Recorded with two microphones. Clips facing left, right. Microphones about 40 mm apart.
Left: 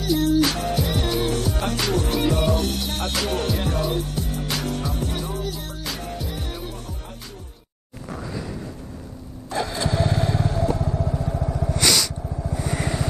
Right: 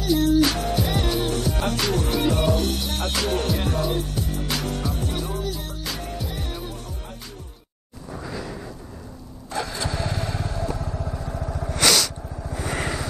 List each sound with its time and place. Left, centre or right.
0.0 s music: centre
8.2 s a sound: centre
9.5 s vehicle: left
10.5 s motorcycle: left
11.0 s vehicle: centre
11.7 s snort: centre